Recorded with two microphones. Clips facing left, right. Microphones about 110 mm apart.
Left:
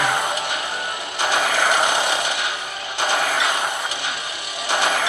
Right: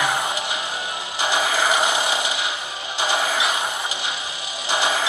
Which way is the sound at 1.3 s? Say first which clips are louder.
Left 1 dB; 60° left (ahead or behind).